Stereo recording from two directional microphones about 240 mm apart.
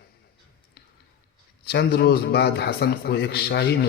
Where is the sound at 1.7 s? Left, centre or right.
Left.